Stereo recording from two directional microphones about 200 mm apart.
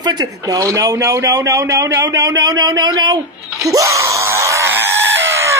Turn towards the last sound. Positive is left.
turn(degrees=-15)  # may be behind; listen again after turning